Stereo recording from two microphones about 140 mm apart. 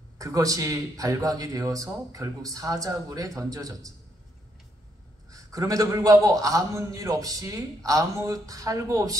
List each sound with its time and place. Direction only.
0.2 s a man's voice: 25° right (ahead or behind)
5.3 s a man's voice: 25° right (ahead or behind)